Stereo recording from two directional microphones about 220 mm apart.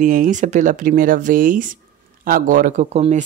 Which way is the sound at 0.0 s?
35° right (ahead or behind).